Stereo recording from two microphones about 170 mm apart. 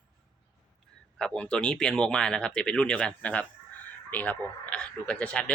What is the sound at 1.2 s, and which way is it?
Speech, 5° left (ahead or behind).